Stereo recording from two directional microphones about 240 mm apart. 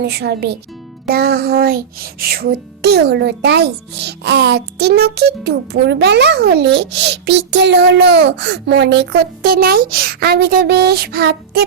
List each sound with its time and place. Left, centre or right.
0.0 s music: right
9.1 s speech: right